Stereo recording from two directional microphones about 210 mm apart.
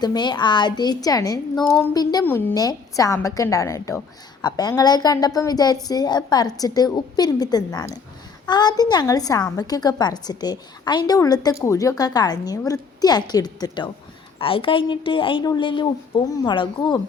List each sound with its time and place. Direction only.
0.0 s a woman's voice: 20° left (ahead or behind)